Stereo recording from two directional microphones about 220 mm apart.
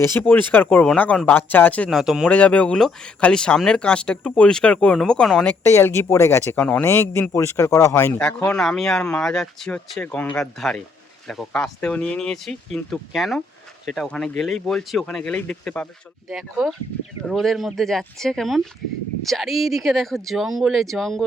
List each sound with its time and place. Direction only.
0.0 s speech: 10° left (ahead or behind)